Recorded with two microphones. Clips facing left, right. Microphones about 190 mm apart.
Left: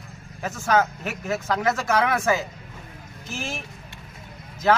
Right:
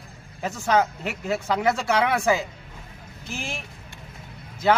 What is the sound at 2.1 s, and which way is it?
Speech, 10° right (ahead or behind).